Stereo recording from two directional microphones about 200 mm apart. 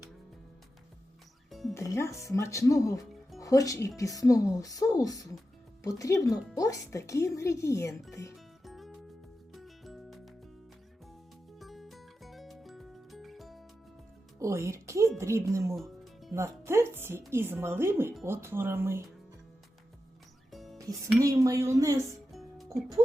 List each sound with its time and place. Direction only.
1.5 s music: centre (ahead or behind)
1.7 s speech: 15° left (ahead or behind)
8.6 s music: centre (ahead or behind)
11.6 s music: centre (ahead or behind)
14.3 s speech: 15° right (ahead or behind)
15.7 s music: centre (ahead or behind)
16.3 s speech: 15° right (ahead or behind)
20.5 s music: centre (ahead or behind)
20.7 s speech: 15° right (ahead or behind)
22.3 s music: centre (ahead or behind)